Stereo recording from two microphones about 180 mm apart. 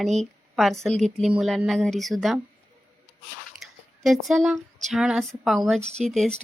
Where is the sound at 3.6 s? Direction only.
Centre (ahead or behind).